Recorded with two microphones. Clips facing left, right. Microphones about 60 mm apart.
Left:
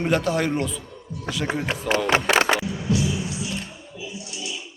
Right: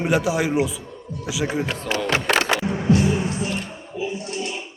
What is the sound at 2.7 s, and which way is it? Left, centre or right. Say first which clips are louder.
Music: right 5 dB; right.